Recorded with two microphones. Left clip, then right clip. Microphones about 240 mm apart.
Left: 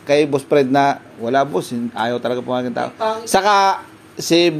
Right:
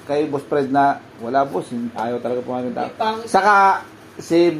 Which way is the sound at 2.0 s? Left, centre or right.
Left.